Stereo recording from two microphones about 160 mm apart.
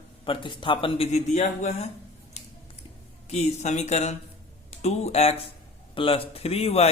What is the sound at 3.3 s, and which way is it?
A man's voice, 45° left (ahead or behind).